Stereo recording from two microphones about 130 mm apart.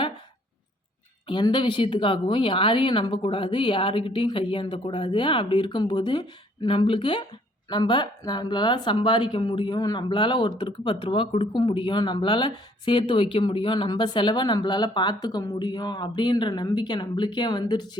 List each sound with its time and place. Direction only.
1.3 s speech: 40° left (ahead or behind)